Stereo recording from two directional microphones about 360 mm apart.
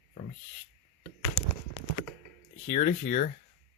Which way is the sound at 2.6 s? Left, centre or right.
Left.